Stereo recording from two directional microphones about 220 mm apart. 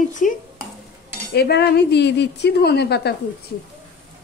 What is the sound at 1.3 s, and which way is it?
Speech, 45° left (ahead or behind).